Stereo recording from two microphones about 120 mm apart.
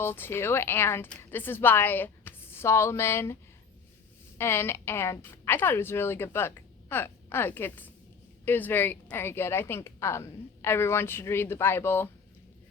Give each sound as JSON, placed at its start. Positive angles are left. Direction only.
{"t": 0.0, "sound": "a woman's voice", "side_deg": 20}
{"t": 4.4, "sound": "a woman's voice", "side_deg": 20}